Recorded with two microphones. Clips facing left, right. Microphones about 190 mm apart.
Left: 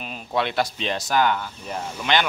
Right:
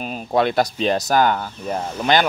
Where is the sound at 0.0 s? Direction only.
40° right (ahead or behind).